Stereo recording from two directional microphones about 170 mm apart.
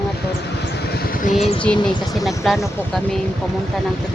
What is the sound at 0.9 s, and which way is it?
Vehicle, 60° left (ahead or behind).